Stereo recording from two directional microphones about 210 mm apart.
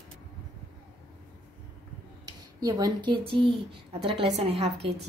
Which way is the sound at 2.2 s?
20° right (ahead or behind).